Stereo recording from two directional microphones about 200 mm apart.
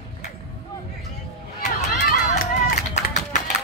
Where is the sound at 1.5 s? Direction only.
40° left (ahead or behind).